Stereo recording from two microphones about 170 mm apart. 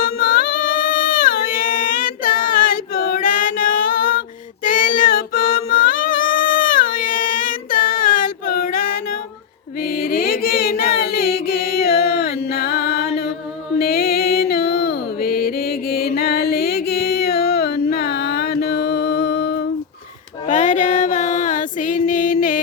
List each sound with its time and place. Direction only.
0.0 s a sound: 60° left (ahead or behind)
4.6 s child singing: 55° left (ahead or behind)
9.8 s chant: 65° left (ahead or behind)
12.5 s music: 70° left (ahead or behind)
20.5 s female singing: 45° left (ahead or behind)